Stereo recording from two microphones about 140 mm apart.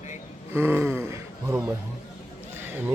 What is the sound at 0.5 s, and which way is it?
Gasp, 15° right (ahead or behind).